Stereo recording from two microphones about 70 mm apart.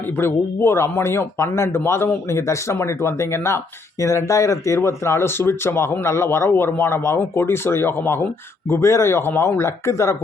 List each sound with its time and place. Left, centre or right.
0.2 s speech: left
4.0 s speech: left